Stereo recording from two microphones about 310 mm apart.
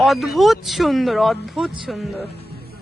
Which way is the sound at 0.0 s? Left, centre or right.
Centre.